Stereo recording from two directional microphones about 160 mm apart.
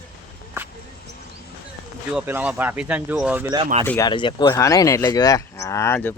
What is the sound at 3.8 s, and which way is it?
Speech, 20° left (ahead or behind).